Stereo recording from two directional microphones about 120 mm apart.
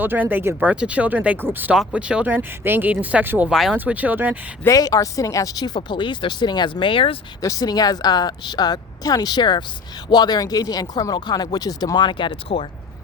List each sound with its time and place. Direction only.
0.0 s speech: 15° right (ahead or behind)
3.8 s speech: 10° right (ahead or behind)
4.6 s speech: 30° left (ahead or behind); by 7.2 s 50° left (ahead or behind)
7.4 s speech: 30° left (ahead or behind); by 12.6 s 50° left (ahead or behind)